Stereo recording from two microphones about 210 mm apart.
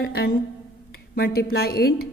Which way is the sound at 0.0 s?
45° left (ahead or behind).